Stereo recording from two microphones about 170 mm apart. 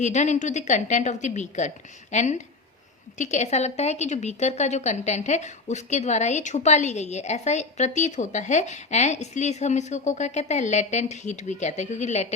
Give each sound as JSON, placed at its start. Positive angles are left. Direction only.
{"t": 0.0, "sound": "a woman's voice", "side_deg": 45}